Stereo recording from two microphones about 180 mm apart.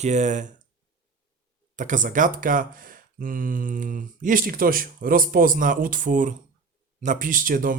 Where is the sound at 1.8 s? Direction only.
45° right (ahead or behind).